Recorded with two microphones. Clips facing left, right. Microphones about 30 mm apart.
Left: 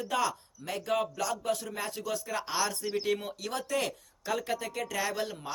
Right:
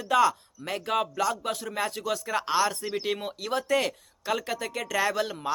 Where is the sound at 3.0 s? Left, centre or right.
Right.